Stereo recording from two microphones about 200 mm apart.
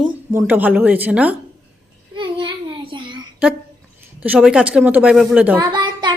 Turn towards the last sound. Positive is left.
turn(degrees=-25)  # may be behind; listen again after turning